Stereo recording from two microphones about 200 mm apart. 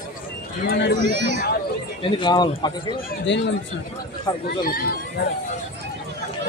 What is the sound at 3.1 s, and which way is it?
Speech, 60° left (ahead or behind).